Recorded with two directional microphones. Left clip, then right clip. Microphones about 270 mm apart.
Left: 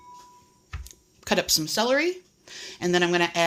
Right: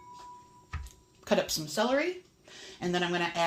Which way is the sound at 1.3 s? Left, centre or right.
Left.